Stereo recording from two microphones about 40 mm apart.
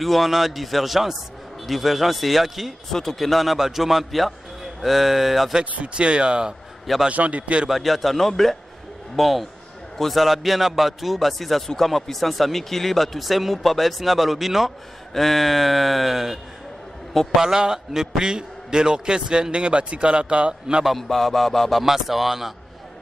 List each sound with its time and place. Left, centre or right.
0.0 s a man's voice: centre
2.9 s a man's voice: centre
5.8 s a man's voice: right
7.1 s a man's voice: right
7.7 s a man's voice: centre
17.4 s a man's voice: centre
21.1 s music: centre
21.8 s speech: centre